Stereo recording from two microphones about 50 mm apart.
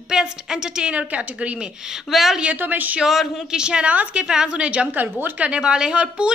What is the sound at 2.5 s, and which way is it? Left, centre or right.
Speech, right.